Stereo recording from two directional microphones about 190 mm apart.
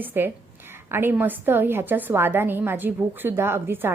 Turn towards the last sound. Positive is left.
turn(degrees=-10)  # may be behind; listen again after turning